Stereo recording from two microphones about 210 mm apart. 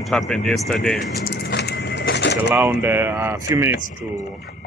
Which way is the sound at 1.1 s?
50° left (ahead or behind).